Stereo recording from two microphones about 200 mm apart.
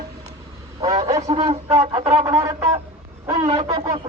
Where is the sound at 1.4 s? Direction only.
30° right (ahead or behind).